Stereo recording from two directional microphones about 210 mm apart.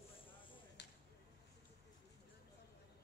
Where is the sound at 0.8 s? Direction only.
55° left (ahead or behind).